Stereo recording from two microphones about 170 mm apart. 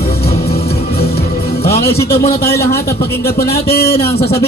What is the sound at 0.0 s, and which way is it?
Music, 65° left (ahead or behind).